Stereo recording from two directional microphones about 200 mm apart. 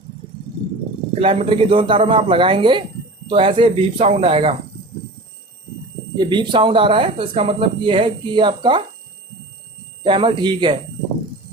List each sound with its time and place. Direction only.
1.2 s speech: 30° right (ahead or behind)
6.1 s speech: 25° right (ahead or behind)
10.0 s speech: 25° right (ahead or behind)